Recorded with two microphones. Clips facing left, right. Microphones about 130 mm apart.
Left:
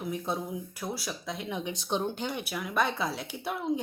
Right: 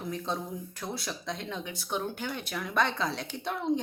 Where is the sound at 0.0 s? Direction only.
10° left (ahead or behind).